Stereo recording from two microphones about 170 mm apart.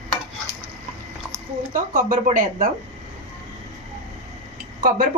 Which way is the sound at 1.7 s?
55° right (ahead or behind).